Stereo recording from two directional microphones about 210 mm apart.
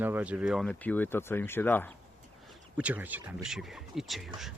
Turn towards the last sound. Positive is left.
turn(degrees=0)  # may be behind; listen again after turning